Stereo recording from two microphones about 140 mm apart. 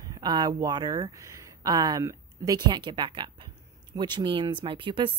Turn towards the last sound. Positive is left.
turn(degrees=-35)  # may be behind; listen again after turning